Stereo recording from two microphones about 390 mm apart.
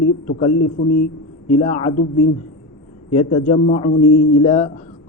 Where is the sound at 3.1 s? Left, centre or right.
Centre.